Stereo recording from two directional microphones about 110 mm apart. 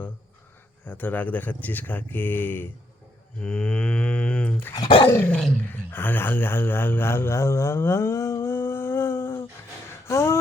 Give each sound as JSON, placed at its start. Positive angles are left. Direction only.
{"t": 0.9, "sound": "speech", "side_deg": 15}